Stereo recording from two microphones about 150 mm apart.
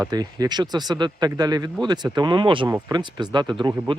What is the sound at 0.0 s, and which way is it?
Speech, 25° right (ahead or behind).